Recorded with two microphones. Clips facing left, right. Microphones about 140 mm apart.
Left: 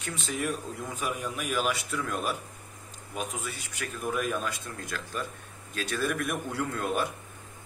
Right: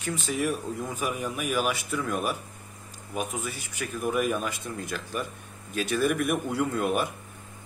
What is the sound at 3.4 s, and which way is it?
Speech, 10° right (ahead or behind).